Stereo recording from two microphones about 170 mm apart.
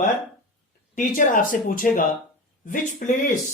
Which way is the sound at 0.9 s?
50° left (ahead or behind).